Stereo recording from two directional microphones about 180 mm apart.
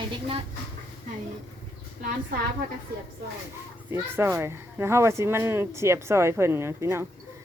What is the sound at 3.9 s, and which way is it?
Speech, 15° right (ahead or behind).